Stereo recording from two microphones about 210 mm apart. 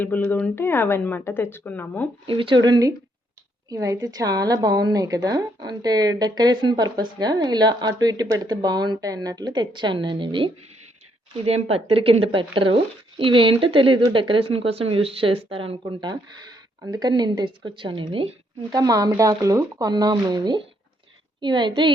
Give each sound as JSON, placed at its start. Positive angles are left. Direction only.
{"t": 0.3, "sound": "a woman's voice", "side_deg": 10}
{"t": 2.2, "sound": "speech", "side_deg": -25}